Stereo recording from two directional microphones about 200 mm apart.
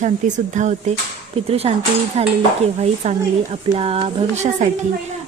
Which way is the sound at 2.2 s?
30° right (ahead or behind).